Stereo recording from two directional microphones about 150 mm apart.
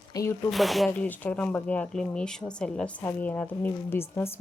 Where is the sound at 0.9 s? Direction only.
10° left (ahead or behind).